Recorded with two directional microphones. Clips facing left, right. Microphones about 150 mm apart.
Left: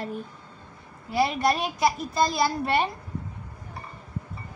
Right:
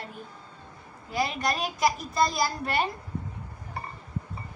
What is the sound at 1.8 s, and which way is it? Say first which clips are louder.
Speech: right 2 dB; 25° left (ahead or behind).